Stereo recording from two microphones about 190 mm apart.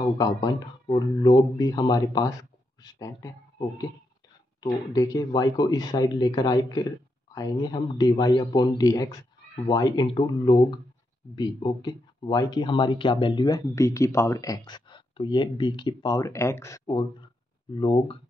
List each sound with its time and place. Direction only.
0.2 s speech: 20° left (ahead or behind)
4.6 s speech: 20° left (ahead or behind)